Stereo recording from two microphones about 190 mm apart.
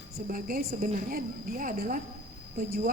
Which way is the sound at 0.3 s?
50° right (ahead or behind).